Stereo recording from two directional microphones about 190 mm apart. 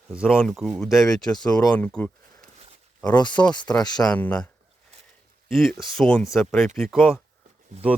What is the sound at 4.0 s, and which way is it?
Speech, 5° left (ahead or behind).